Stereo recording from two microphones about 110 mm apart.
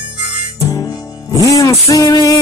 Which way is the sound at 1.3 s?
30° left (ahead or behind).